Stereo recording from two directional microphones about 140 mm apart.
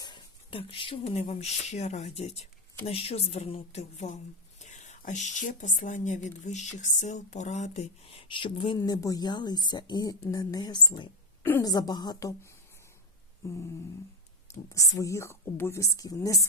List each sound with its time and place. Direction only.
0.0 s a woman's voice: 35° left (ahead or behind)
14.7 s a woman's voice: 25° left (ahead or behind)